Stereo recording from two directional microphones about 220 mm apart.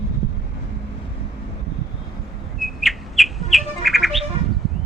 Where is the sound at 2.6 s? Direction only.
Centre (ahead or behind).